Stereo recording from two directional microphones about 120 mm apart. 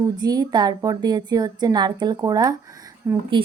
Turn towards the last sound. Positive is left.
turn(degrees=-20)  # may be behind; listen again after turning